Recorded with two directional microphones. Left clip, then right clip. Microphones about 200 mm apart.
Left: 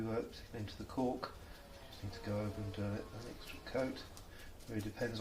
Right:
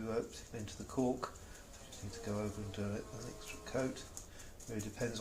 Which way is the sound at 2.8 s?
30° right (ahead or behind).